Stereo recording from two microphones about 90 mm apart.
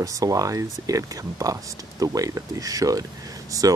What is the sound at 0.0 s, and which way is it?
Speech, 40° right (ahead or behind).